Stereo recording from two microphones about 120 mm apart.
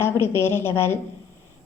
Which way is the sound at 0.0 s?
20° left (ahead or behind).